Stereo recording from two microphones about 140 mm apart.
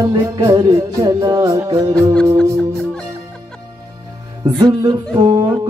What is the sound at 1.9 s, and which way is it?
Music, 5° left (ahead or behind).